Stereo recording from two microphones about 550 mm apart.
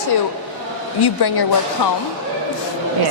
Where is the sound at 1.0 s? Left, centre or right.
Left.